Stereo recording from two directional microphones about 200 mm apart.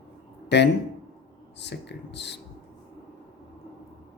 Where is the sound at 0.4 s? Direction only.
60° left (ahead or behind).